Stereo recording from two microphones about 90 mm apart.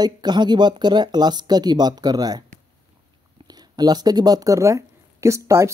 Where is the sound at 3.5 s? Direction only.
50° right (ahead or behind).